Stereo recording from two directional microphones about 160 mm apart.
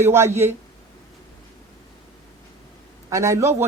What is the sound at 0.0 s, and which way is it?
Speech, 15° right (ahead or behind).